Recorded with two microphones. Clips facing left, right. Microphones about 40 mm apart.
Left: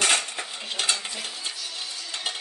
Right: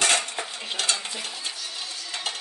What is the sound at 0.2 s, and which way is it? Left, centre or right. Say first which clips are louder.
Cutlery: right 1 dB; centre.